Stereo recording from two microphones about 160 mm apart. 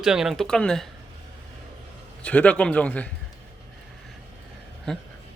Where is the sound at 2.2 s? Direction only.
5° left (ahead or behind).